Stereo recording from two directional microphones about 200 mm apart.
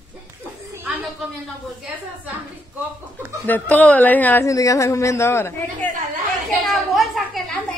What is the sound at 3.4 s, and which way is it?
Speech, 10° left (ahead or behind).